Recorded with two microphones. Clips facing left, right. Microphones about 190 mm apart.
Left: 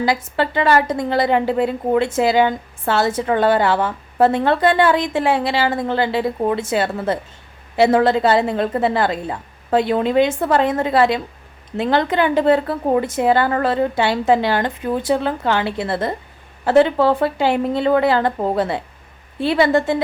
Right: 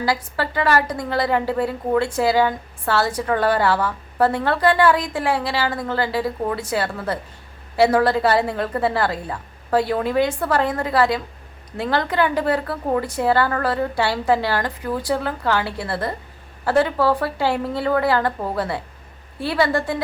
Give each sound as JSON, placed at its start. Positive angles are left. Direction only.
{"t": 0.0, "sound": "a woman's voice", "side_deg": 20}